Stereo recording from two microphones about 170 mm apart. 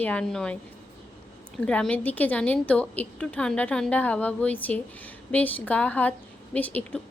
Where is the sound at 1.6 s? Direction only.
5° left (ahead or behind).